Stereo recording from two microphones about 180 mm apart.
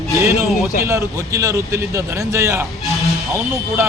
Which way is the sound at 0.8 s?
15° right (ahead or behind).